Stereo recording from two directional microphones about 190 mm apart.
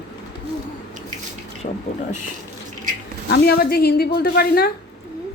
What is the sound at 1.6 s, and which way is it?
Speech, 40° left (ahead or behind).